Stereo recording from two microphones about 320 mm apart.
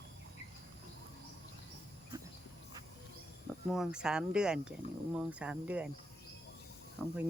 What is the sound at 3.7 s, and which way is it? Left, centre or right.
Speech, centre.